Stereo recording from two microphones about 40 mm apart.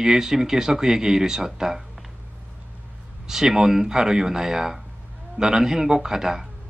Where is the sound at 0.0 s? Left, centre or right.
Centre.